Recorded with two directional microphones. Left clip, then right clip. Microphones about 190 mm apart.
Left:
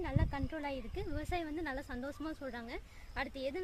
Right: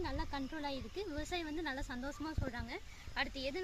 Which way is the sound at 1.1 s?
40° left (ahead or behind).